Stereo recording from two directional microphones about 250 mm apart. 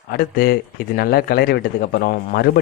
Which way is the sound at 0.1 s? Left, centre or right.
Left.